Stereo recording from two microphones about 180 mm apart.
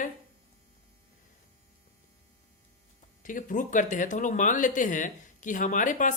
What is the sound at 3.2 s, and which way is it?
Speech, 45° left (ahead or behind).